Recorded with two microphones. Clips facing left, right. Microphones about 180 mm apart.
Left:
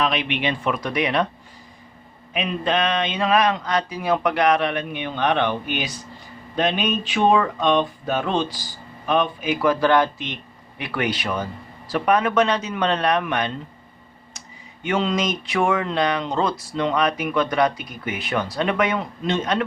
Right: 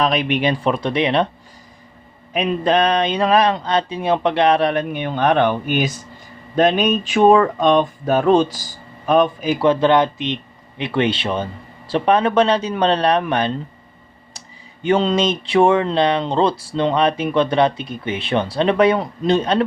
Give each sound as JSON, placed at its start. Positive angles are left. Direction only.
{"t": 0.0, "sound": "speech", "side_deg": -40}
{"t": 2.3, "sound": "speech", "side_deg": -40}
{"t": 14.8, "sound": "speech", "side_deg": -30}